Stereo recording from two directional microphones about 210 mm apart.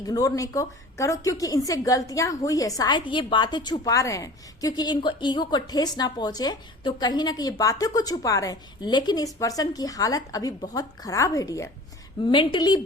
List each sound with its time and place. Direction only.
0.0 s a woman's voice: 15° left (ahead or behind)